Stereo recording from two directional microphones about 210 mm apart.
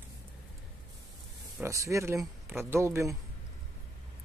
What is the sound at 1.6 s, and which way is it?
Speech, 15° right (ahead or behind).